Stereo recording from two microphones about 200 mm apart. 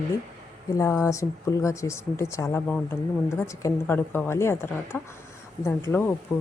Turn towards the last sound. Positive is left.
turn(degrees=10)  # may be behind; listen again after turning